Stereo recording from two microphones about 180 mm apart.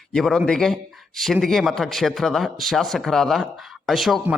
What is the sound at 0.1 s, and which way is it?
A man's voice, centre (ahead or behind).